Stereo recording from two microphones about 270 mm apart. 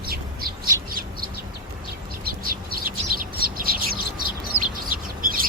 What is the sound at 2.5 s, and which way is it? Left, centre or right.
Bird, right.